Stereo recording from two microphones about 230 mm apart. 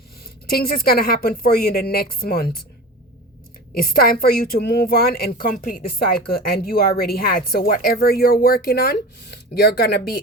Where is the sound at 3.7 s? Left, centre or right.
Left.